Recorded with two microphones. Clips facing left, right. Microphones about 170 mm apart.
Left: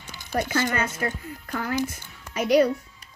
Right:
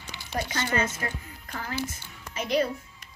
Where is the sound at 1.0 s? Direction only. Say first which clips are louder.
Left 6 dB; 35° left (ahead or behind).